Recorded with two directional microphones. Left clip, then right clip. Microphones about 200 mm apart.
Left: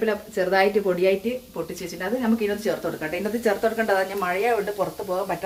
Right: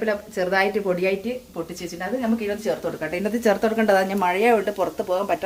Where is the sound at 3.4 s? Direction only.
40° right (ahead or behind).